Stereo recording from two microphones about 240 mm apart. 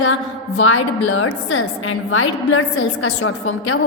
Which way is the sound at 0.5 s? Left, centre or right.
Left.